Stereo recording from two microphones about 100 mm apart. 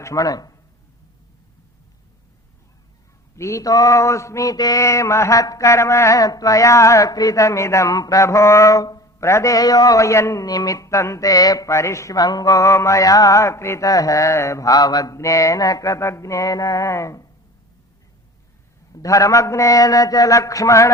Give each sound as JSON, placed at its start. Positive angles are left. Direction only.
{"t": 0.0, "sound": "mantra", "side_deg": 35}
{"t": 3.3, "sound": "mantra", "side_deg": 30}
{"t": 18.9, "sound": "mantra", "side_deg": 35}